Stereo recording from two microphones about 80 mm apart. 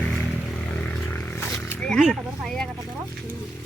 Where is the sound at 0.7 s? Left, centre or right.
Centre.